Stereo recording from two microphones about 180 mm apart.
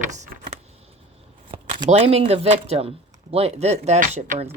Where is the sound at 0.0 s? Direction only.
50° right (ahead or behind).